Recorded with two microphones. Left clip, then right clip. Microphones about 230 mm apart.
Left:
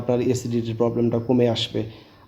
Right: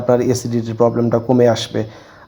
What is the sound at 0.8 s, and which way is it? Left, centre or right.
A man's voice, right.